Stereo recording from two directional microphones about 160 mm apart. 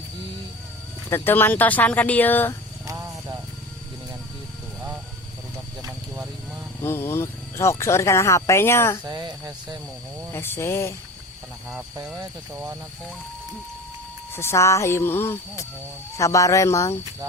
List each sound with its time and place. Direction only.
1.1 s speech: 15° left (ahead or behind)
2.8 s a sound: 20° right (ahead or behind)
6.8 s speech: 15° left (ahead or behind)
9.0 s speech: 25° right (ahead or behind)
10.3 s speech: 15° left (ahead or behind)
12.1 s speech: 10° right (ahead or behind)
14.3 s speech: 15° left (ahead or behind)